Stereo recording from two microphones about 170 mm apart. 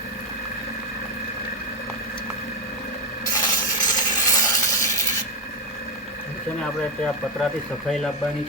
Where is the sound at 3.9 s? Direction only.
20° left (ahead or behind).